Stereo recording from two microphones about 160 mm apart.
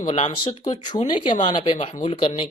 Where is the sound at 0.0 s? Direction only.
40° left (ahead or behind).